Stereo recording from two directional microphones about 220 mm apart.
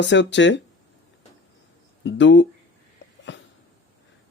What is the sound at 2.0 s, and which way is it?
Speech, 55° left (ahead or behind).